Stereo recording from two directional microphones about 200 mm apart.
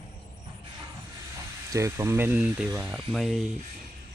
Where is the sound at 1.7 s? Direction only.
15° right (ahead or behind).